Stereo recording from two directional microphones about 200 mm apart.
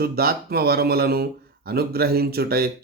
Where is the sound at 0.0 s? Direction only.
50° right (ahead or behind).